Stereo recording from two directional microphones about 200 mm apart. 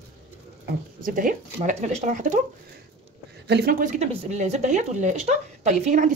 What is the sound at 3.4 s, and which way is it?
Speech, 55° right (ahead or behind).